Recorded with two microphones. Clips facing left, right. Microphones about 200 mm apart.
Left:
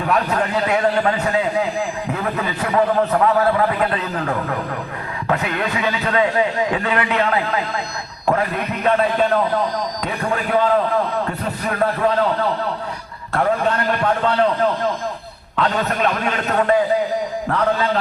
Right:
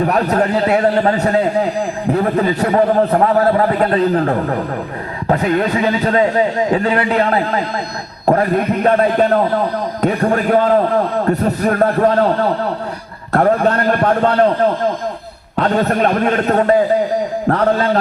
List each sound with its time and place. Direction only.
0.0 s a man's voice: 40° right (ahead or behind)
13.3 s a man's voice: 40° right (ahead or behind)
17.5 s a man's voice: 50° right (ahead or behind)